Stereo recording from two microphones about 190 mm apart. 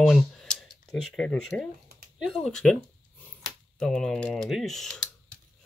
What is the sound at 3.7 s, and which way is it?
Speech, 5° left (ahead or behind).